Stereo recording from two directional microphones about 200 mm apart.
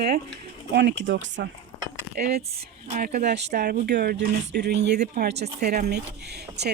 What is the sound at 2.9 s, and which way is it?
Speech, 35° right (ahead or behind).